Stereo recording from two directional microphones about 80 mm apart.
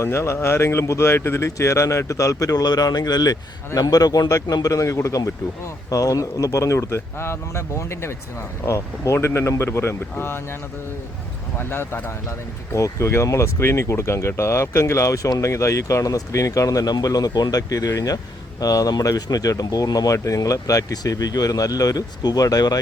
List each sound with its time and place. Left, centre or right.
0.0 s speech: left